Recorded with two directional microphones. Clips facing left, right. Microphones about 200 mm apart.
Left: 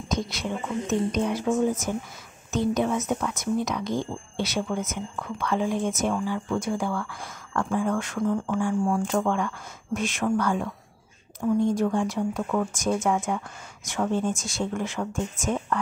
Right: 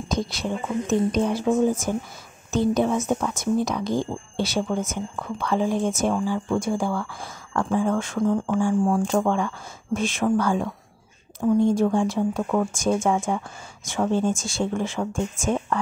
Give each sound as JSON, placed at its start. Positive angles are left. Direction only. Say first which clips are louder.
{"t": 0.1, "sound": "speech", "louder": "right 2 dB", "side_deg": -30}